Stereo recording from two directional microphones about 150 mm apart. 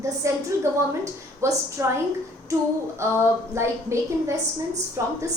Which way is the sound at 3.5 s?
20° right (ahead or behind).